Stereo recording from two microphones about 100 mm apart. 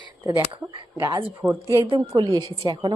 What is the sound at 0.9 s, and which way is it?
Speech, 25° right (ahead or behind).